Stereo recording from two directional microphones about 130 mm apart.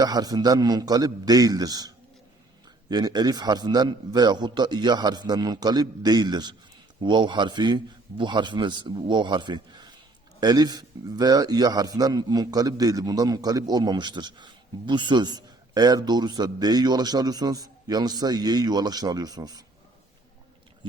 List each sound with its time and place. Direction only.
0.0 s a man's voice: 30° right (ahead or behind)
2.9 s a man's voice: 30° right (ahead or behind)